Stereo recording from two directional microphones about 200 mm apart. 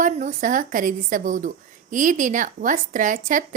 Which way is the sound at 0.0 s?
35° right (ahead or behind).